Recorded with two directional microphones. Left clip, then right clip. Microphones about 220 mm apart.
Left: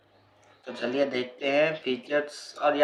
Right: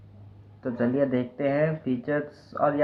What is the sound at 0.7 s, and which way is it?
Speech, 20° left (ahead or behind).